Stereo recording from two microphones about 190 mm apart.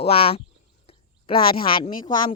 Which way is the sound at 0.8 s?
30° left (ahead or behind).